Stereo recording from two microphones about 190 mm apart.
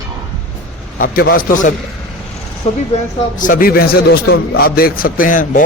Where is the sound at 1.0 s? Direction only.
50° left (ahead or behind).